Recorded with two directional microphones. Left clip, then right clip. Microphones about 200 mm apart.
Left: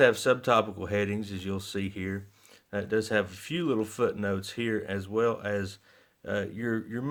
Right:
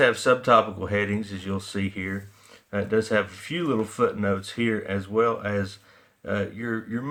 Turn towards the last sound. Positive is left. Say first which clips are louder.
# right 2 dB
turn(degrees=50)  # may be behind; listen again after turning